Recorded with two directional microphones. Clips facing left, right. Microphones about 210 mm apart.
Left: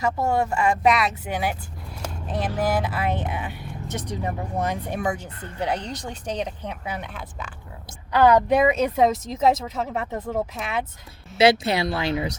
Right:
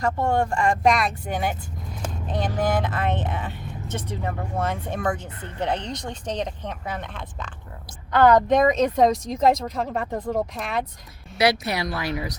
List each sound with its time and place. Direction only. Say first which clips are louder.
0.0 s speech: even; 5° left (ahead or behind)
11.3 s a woman's voice: left 4 dB; 25° left (ahead or behind)